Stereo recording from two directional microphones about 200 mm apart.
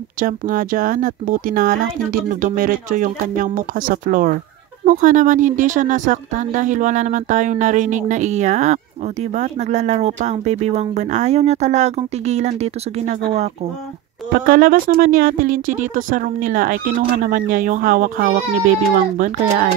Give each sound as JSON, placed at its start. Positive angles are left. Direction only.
{"t": 0.2, "sound": "speech", "side_deg": -45}
{"t": 14.4, "sound": "speech", "side_deg": -45}